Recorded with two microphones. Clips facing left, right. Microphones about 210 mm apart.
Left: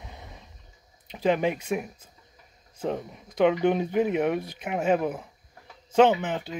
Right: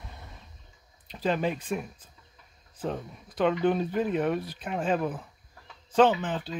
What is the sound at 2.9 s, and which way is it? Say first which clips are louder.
Speech: left 5 dB; 15° left (ahead or behind).